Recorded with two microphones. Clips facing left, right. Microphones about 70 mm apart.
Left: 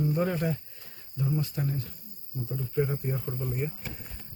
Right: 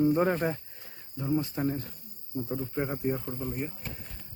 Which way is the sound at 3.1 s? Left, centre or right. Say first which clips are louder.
Right 2 dB; centre.